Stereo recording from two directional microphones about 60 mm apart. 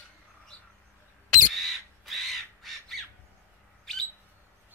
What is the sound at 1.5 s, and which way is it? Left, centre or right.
Crow, centre.